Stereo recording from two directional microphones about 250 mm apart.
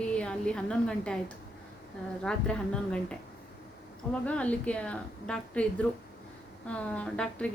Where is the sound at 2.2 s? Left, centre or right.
Centre.